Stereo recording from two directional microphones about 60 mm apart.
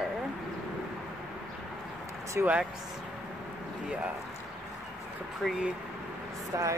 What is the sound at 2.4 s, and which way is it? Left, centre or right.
Speech, right.